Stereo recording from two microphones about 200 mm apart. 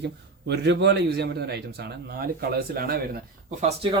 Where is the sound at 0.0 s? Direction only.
55° right (ahead or behind).